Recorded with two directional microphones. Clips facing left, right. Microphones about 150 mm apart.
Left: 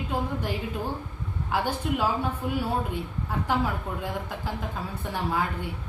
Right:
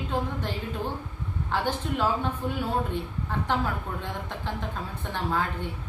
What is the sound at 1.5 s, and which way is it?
A woman's voice, 10° left (ahead or behind).